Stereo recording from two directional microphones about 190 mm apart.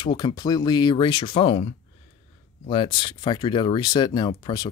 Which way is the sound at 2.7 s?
25° left (ahead or behind).